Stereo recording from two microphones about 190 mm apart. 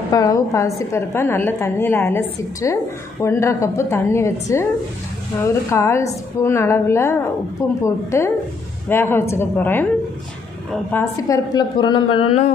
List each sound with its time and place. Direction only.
0.1 s a woman's voice: 20° left (ahead or behind)